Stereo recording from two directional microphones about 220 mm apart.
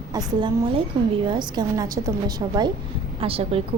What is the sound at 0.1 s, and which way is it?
A child's voice, 15° right (ahead or behind).